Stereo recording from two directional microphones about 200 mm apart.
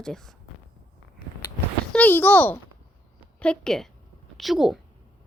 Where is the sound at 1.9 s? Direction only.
10° left (ahead or behind).